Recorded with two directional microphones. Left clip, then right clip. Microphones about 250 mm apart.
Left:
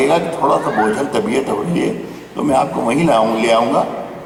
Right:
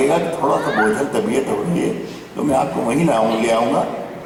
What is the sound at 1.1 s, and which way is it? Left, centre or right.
A man's voice, centre.